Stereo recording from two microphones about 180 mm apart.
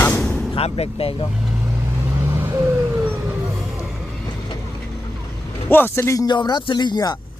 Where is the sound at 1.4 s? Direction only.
5° right (ahead or behind).